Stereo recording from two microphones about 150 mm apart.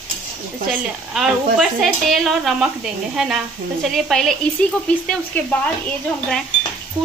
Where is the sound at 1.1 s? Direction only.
Centre (ahead or behind).